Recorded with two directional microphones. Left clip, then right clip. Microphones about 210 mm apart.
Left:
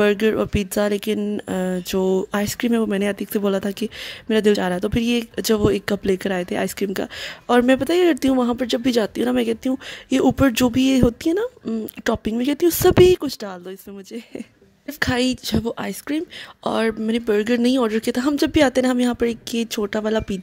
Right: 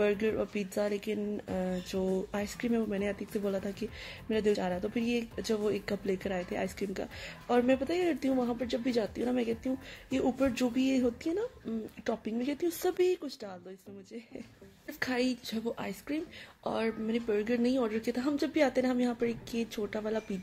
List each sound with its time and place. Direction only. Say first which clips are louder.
0.0 s speech: left 12 dB; 55° left (ahead or behind)
15.0 s speech: left 11 dB; 50° left (ahead or behind)